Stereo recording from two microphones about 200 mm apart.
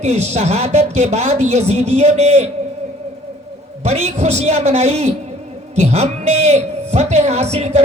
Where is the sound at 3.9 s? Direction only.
30° right (ahead or behind).